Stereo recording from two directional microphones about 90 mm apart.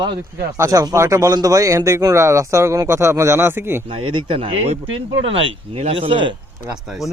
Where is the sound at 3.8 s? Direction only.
85° right.